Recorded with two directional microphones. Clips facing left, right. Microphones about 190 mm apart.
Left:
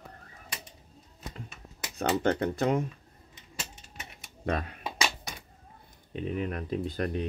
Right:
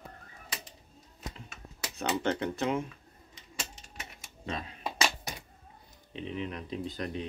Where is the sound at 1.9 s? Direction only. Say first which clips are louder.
Left 4 dB; 40° left (ahead or behind).